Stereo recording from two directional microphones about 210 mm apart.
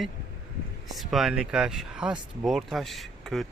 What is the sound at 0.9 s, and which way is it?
Speech, centre (ahead or behind).